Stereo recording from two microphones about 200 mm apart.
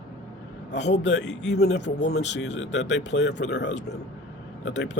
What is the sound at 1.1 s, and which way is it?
Speech, 60° left (ahead or behind).